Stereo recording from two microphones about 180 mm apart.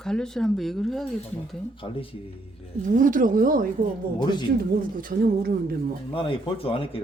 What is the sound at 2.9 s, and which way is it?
Speech, 45° right (ahead or behind).